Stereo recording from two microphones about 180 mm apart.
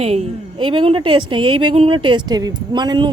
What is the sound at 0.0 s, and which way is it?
A woman's voice, 35° right (ahead or behind).